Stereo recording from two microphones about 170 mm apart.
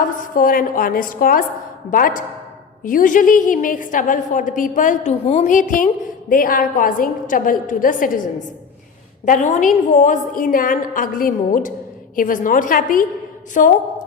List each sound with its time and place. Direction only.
0.3 s a woman's voice: 55° left (ahead or behind)